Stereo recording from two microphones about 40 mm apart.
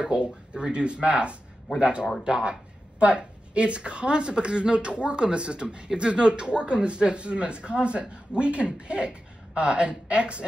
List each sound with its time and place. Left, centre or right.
0.0 s a man's voice: right